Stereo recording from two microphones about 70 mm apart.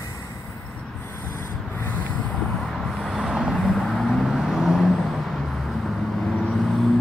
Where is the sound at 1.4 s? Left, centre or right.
Left.